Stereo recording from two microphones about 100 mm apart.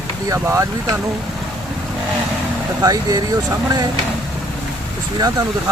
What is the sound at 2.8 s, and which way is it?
Speech, 40° right (ahead or behind).